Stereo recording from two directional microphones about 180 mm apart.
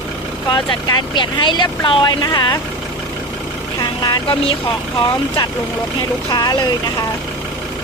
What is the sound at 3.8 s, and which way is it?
Vehicle, 20° left (ahead or behind).